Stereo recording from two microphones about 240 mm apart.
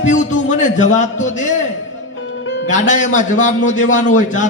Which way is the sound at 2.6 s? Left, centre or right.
Left.